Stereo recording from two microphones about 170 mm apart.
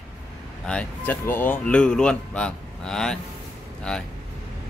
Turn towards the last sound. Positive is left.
turn(degrees=5)  # may be behind; listen again after turning